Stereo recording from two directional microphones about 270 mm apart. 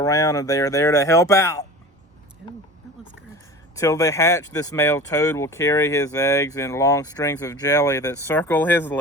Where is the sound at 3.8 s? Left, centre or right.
Centre.